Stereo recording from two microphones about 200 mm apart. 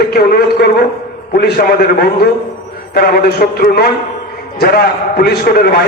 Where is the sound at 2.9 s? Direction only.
50° left (ahead or behind).